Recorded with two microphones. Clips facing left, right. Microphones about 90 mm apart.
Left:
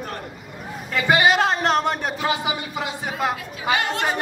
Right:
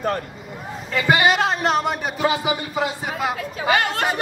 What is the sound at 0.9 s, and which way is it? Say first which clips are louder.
Speech: even; centre (ahead or behind).